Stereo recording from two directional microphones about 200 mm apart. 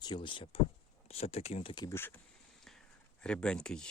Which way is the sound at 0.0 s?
20° left (ahead or behind).